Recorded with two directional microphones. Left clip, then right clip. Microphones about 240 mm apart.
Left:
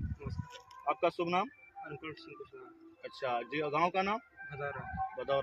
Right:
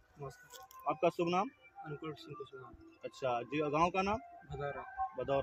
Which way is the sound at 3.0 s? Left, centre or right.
Centre.